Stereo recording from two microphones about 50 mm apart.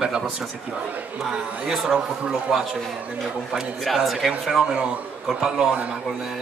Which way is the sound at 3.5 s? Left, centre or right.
Centre.